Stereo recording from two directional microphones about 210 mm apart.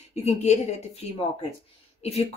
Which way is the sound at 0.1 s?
30° left (ahead or behind).